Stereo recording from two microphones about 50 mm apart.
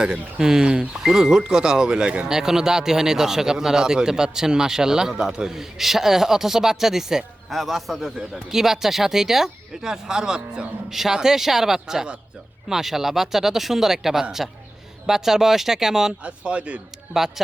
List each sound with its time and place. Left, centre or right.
0.3 s speech: centre
16.2 s a man's voice: right
17.2 s speech: centre